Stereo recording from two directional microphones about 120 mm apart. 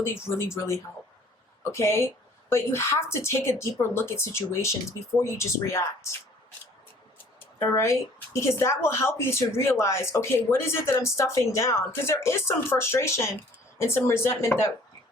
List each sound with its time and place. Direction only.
0.0 s speech: 20° left (ahead or behind)
7.3 s speech: 20° left (ahead or behind)